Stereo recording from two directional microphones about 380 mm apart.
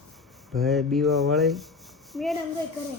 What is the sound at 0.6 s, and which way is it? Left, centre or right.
Speech, centre.